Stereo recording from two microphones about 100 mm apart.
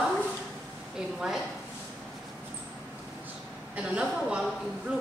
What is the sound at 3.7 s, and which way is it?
Speech, 10° right (ahead or behind).